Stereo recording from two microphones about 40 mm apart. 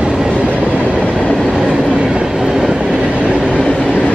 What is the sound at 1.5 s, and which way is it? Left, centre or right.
Train, right.